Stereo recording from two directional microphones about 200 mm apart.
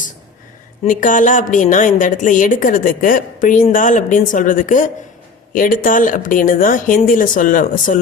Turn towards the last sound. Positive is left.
turn(degrees=40)  # may be behind; listen again after turning